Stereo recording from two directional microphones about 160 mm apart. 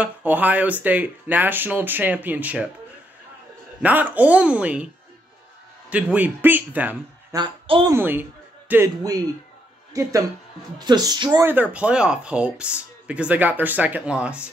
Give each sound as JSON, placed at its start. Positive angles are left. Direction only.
{"t": 0.0, "sound": "speech", "side_deg": -10}
{"t": 3.8, "sound": "speech", "side_deg": -10}
{"t": 5.9, "sound": "speech", "side_deg": -10}
{"t": 7.3, "sound": "speech", "side_deg": -30}
{"t": 7.9, "sound": "speech", "side_deg": -10}
{"t": 11.4, "sound": "speech", "side_deg": -10}